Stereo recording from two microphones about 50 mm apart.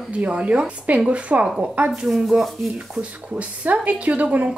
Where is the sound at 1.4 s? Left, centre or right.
Centre.